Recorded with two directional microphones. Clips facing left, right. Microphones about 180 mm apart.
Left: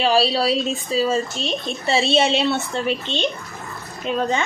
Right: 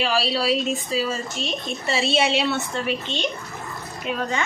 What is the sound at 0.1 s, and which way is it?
A woman's voice, 25° left (ahead or behind).